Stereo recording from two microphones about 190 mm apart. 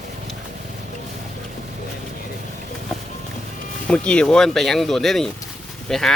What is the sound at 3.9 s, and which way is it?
Speech, 5° left (ahead or behind).